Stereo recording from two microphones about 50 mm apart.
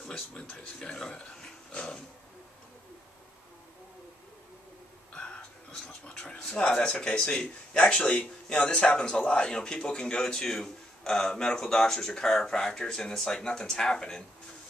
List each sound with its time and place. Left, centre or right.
0.0 s speech: centre
5.1 s a sound: centre
6.7 s a man's voice: left